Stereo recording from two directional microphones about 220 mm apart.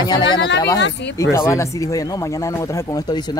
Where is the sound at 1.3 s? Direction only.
10° left (ahead or behind).